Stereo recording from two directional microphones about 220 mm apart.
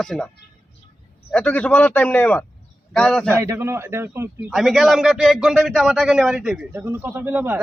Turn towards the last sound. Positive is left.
turn(degrees=-10)  # may be behind; listen again after turning